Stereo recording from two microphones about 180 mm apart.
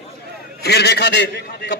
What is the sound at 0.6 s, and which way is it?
A man's voice, 65° left (ahead or behind).